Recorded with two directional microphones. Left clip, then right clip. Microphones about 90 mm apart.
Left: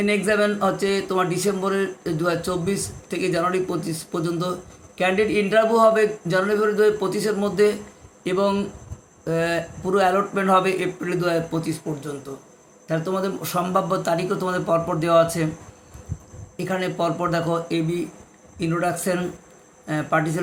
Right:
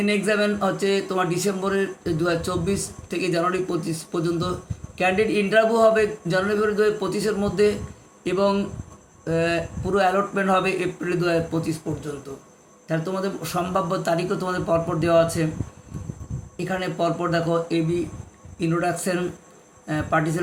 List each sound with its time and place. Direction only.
0.0 s speech: 20° left (ahead or behind)
16.6 s speech: 25° left (ahead or behind)